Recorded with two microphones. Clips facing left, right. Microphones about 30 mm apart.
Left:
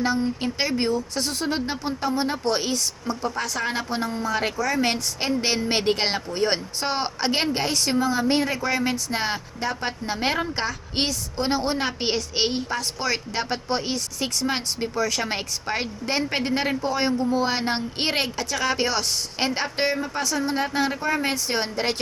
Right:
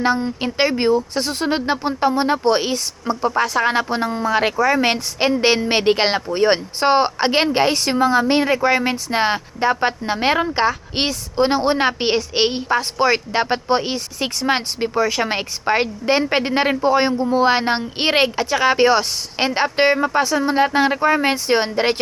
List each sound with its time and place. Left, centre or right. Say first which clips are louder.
0.0 s speech: right 4 dB; right